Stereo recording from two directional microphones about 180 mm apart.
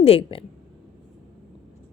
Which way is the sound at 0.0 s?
30° left (ahead or behind).